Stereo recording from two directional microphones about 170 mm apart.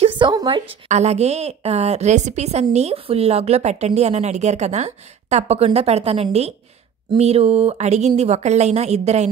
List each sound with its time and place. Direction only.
0.0 s a woman's voice: 25° right (ahead or behind)
0.8 s a woman's voice: 40° right (ahead or behind)